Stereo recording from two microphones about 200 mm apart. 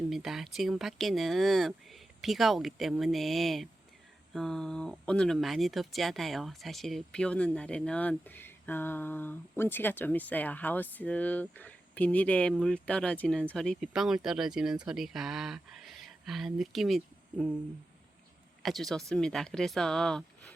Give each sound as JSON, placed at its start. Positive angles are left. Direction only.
{"t": 0.1, "sound": "speech", "side_deg": 0}
{"t": 18.6, "sound": "speech", "side_deg": 0}